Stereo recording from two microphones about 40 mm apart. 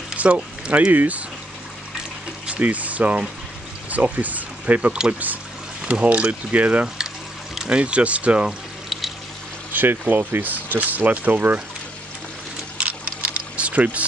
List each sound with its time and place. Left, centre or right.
0.1 s speech: right
2.4 s speech: right
6.0 s speech: right
8.8 s water: centre
9.7 s speech: right
12.7 s a sound: right